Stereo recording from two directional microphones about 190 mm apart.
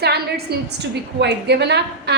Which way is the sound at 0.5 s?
60° right (ahead or behind).